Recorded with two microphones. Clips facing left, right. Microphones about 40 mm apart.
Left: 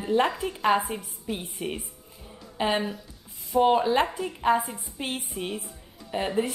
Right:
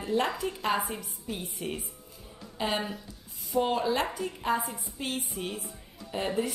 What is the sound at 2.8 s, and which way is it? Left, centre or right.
Speech, centre.